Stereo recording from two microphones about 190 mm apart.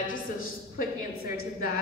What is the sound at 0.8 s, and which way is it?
Speech, 50° left (ahead or behind).